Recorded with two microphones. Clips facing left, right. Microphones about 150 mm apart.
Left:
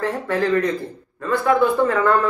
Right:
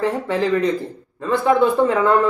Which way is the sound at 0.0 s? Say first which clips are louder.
Right 1 dB; 20° right (ahead or behind).